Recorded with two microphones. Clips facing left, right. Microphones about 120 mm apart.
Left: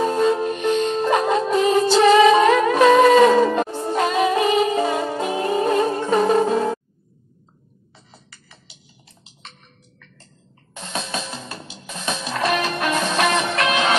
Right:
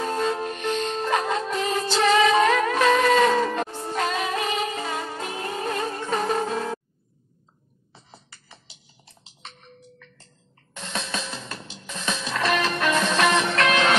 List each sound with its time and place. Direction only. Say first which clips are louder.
0.0 s music: left 7 dB; 10° left (ahead or behind)
10.9 s music: left 3 dB; 15° left (ahead or behind)